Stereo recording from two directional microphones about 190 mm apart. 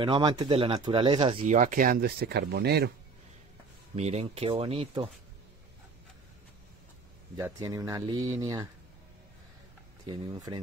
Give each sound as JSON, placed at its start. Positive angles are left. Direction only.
{"t": 0.0, "sound": "speech", "side_deg": -25}
{"t": 3.9, "sound": "speech", "side_deg": -35}
{"t": 7.3, "sound": "speech", "side_deg": -15}
{"t": 10.0, "sound": "speech", "side_deg": -20}